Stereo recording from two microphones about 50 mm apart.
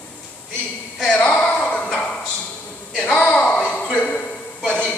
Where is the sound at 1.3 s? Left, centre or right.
Left.